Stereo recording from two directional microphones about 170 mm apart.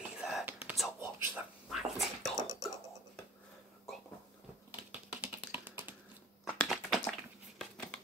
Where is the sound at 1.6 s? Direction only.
Centre (ahead or behind).